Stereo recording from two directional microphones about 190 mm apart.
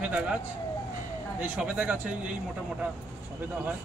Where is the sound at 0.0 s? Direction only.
5° right (ahead or behind).